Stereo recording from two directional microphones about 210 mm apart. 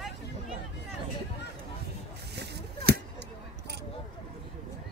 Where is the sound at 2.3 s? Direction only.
50° right (ahead or behind).